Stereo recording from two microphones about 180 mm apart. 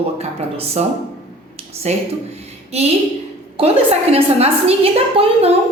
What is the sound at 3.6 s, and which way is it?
A woman's voice, 30° right (ahead or behind).